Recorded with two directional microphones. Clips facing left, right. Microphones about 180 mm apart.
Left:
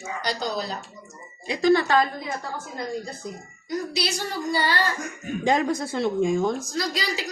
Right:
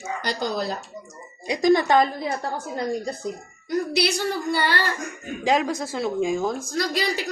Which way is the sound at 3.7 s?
60° right (ahead or behind).